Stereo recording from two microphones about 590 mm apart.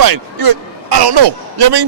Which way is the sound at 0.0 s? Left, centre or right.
Right.